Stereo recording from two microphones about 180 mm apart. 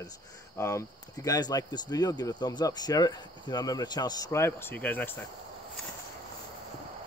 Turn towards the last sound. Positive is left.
turn(degrees=10)  # may be behind; listen again after turning